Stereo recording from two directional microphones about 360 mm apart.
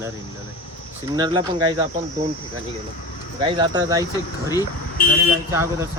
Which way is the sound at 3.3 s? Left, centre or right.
Centre.